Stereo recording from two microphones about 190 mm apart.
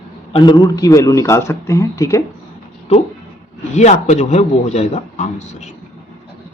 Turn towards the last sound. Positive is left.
turn(degrees=35)  # may be behind; listen again after turning